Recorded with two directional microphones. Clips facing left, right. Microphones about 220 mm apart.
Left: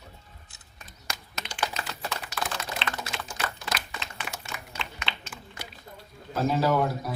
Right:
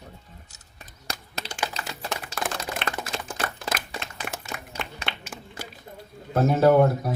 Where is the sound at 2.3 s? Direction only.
50° right (ahead or behind).